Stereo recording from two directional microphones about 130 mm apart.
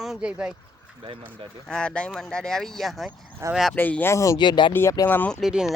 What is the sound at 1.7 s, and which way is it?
Speech, 5° left (ahead or behind).